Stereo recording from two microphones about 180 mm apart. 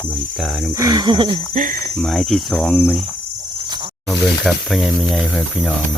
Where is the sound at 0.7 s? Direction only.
20° right (ahead or behind).